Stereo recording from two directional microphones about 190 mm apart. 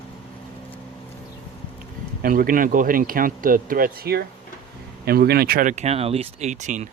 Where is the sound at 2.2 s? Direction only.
50° right (ahead or behind).